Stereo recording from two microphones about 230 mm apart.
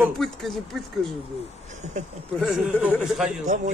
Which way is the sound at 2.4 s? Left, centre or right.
Centre.